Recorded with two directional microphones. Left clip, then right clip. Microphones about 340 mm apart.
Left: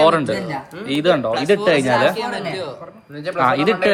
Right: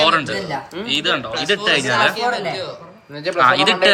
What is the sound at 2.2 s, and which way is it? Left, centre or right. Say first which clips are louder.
Speech: right 3 dB; left.